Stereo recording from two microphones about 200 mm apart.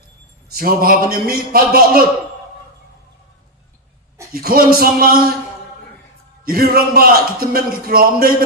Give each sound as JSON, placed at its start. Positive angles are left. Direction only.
{"t": 0.4, "sound": "a man's voice", "side_deg": -45}
{"t": 4.4, "sound": "a man's voice", "side_deg": -45}
{"t": 6.4, "sound": "a man's voice", "side_deg": -50}